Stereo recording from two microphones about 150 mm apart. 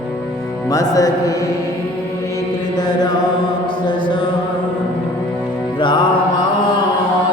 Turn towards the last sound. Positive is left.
turn(degrees=30)  # may be behind; listen again after turning